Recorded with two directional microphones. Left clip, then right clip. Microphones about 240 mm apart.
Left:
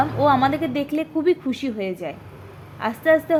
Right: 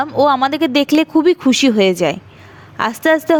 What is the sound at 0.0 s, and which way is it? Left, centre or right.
Speech, right.